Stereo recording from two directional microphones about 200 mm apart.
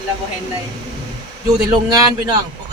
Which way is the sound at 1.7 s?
20° right (ahead or behind).